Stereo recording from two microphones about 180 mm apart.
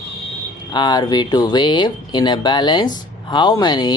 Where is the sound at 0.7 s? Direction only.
25° left (ahead or behind).